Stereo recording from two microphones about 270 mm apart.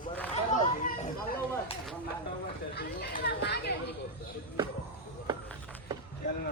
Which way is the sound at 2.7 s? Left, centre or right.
Left.